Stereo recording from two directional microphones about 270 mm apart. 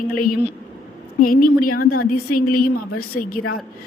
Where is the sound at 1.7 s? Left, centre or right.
Left.